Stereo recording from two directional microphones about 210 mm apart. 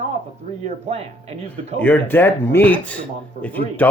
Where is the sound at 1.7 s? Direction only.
10° left (ahead or behind).